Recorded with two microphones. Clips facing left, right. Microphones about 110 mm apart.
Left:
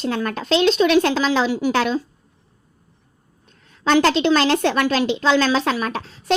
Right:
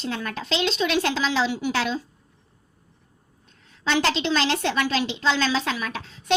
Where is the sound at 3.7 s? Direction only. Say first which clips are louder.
Left 7 dB; 45° left (ahead or behind).